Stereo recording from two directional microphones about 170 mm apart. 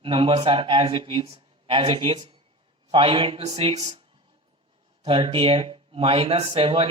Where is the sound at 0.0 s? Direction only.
30° right (ahead or behind).